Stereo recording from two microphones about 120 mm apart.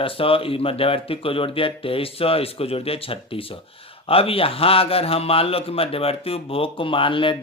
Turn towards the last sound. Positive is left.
turn(degrees=45)  # may be behind; listen again after turning